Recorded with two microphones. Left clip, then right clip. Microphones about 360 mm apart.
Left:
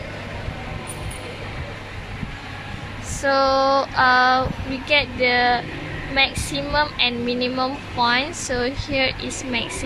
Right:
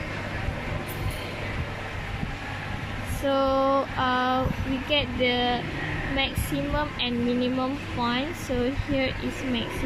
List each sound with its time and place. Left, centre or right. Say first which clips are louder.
3.2 s child singing: left 6 dB; left
4.9 s speech: left 7 dB; left
6.7 s speech: left 10 dB; left